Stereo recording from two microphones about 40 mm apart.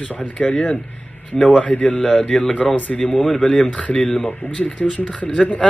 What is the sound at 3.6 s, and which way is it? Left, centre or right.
Speech, left.